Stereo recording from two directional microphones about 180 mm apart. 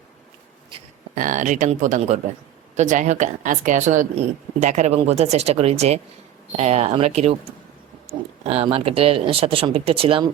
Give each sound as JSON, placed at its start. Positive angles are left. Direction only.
{"t": 1.1, "sound": "a woman's voice", "side_deg": -45}
{"t": 8.4, "sound": "speech", "side_deg": -35}